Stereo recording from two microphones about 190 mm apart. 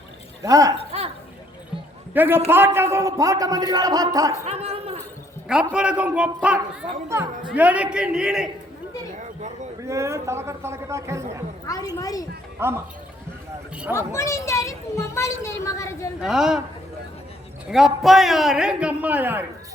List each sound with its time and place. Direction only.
0.4 s a man's voice: 15° right (ahead or behind)
2.1 s a man's voice: 10° right (ahead or behind)
4.4 s chuckle: 35° right (ahead or behind)
5.7 s a man's voice: 5° right (ahead or behind)
9.8 s a man's voice: 15° right (ahead or behind)
11.6 s a woman's voice: 20° left (ahead or behind)
12.5 s speech: 15° right (ahead or behind)
13.9 s speech: 15° left (ahead or behind)
16.2 s a man's voice: centre (ahead or behind)
17.7 s a man's voice: centre (ahead or behind)